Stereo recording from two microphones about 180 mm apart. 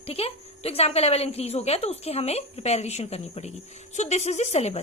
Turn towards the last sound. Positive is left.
turn(degrees=35)  # may be behind; listen again after turning